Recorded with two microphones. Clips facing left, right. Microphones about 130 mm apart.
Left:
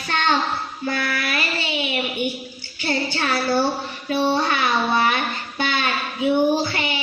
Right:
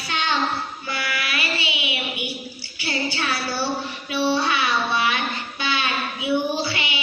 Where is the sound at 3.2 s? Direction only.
40° left (ahead or behind).